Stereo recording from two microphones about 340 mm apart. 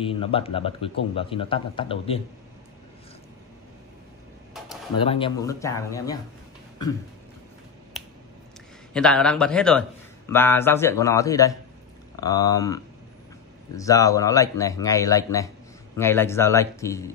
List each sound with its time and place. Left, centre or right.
0.1 s a man's voice: centre
5.0 s a man's voice: centre
8.9 s a man's voice: centre